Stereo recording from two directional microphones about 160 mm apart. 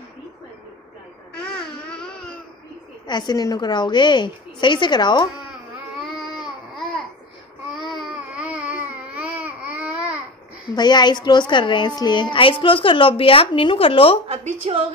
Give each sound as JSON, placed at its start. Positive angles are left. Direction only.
{"t": 1.3, "sound": "babbling", "side_deg": 5}
{"t": 3.1, "sound": "a woman's voice", "side_deg": 25}
{"t": 5.5, "sound": "baby cry", "side_deg": 0}
{"t": 8.1, "sound": "baby cry", "side_deg": -5}
{"t": 10.7, "sound": "a woman's voice", "side_deg": 25}
{"t": 14.2, "sound": "a woman's voice", "side_deg": -40}